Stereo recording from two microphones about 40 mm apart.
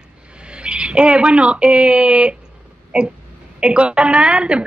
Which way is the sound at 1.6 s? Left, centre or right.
Right.